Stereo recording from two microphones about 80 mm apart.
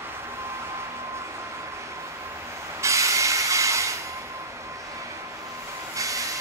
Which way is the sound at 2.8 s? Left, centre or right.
Right.